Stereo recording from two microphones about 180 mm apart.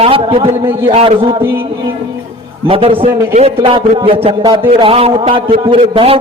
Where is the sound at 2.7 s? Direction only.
30° right (ahead or behind).